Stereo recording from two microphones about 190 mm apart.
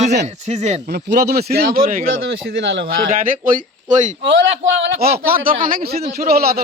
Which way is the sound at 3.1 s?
45° right (ahead or behind).